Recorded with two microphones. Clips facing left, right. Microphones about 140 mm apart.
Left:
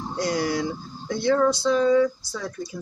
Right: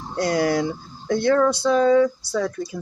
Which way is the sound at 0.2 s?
60° right (ahead or behind).